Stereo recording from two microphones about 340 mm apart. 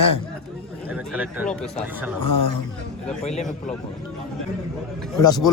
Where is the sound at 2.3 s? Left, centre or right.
Left.